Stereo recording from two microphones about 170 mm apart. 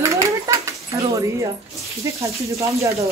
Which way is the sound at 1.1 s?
20° right (ahead or behind).